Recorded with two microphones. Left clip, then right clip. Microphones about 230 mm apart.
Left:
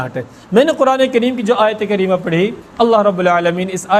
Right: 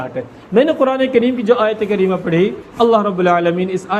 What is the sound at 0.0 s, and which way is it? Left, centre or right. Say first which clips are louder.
A man's voice: left 1 dB; left.